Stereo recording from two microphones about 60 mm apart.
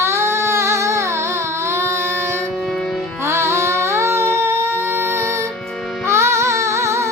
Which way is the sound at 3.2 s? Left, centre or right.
Right.